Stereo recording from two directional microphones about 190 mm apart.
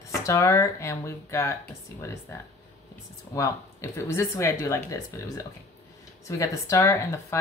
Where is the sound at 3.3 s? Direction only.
15° left (ahead or behind).